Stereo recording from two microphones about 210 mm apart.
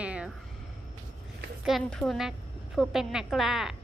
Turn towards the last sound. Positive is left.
turn(degrees=0)  # may be behind; listen again after turning